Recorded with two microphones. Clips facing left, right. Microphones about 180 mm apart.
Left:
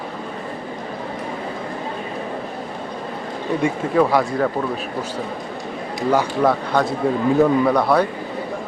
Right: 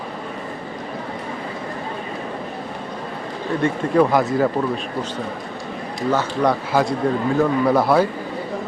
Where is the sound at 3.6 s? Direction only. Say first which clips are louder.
Right 1 dB; centre (ahead or behind).